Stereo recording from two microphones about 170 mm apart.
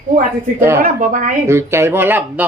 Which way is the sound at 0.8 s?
50° right (ahead or behind).